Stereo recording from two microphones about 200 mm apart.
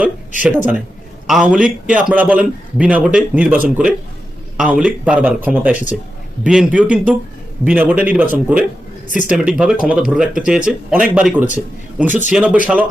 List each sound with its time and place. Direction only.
0.4 s a man's voice: 10° right (ahead or behind)
9.0 s speech: 40° left (ahead or behind)
9.3 s a man's voice: 5° right (ahead or behind)